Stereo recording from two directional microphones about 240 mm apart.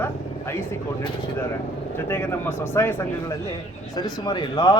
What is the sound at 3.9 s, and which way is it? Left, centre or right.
Speech, centre.